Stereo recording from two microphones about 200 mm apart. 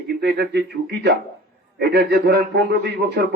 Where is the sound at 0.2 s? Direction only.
55° right (ahead or behind).